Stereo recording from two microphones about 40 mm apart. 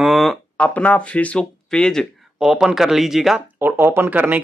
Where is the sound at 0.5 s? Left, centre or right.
Left.